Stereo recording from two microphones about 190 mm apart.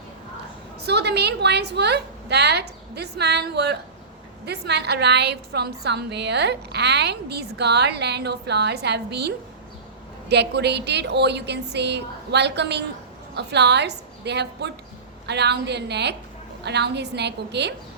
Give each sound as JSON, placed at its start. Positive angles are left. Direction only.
{"t": 0.8, "sound": "a woman's voice", "side_deg": -60}